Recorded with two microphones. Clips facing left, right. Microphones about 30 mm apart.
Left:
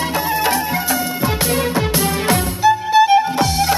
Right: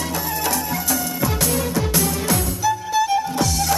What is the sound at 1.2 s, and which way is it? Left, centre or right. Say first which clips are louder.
Music: left 3 dB; left.